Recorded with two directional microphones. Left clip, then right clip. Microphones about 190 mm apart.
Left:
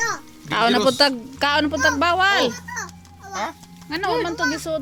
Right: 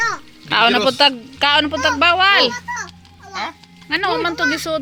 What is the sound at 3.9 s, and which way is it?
Speech, 5° right (ahead or behind).